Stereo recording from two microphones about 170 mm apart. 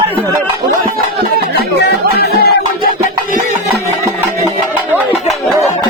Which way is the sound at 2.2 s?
65° left (ahead or behind).